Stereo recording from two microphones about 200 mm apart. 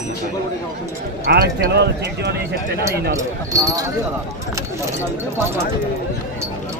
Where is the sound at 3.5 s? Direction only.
15° right (ahead or behind).